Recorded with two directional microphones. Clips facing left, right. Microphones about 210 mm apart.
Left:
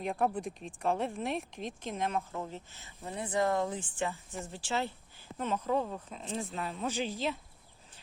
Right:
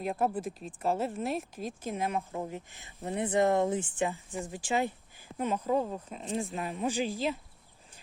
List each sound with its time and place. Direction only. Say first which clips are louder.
0.0 s speech: right 1 dB; 5° right (ahead or behind)